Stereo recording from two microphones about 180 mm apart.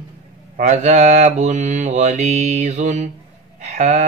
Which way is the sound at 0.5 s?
40° right (ahead or behind).